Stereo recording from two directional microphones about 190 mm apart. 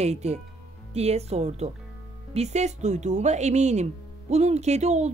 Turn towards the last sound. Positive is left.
turn(degrees=-35)  # may be behind; listen again after turning